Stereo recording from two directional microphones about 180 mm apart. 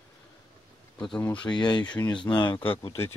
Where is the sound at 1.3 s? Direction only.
25° left (ahead or behind).